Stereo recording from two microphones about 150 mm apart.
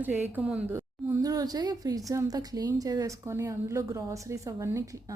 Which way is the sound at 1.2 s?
25° right (ahead or behind).